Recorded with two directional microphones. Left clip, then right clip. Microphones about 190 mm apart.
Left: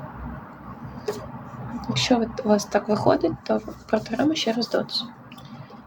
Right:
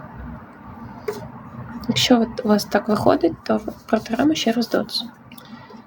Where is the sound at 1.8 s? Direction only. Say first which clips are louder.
Right 5 dB; 30° right (ahead or behind).